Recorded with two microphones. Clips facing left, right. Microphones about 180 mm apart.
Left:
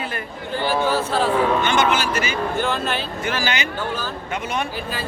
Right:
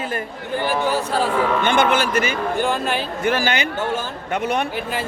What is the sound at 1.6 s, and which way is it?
Speech, 55° right (ahead or behind).